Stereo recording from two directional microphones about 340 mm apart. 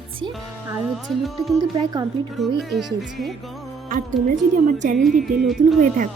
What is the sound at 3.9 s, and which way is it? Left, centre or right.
Speech, right.